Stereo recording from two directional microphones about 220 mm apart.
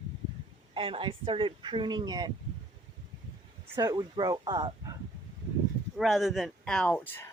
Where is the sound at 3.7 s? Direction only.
15° right (ahead or behind).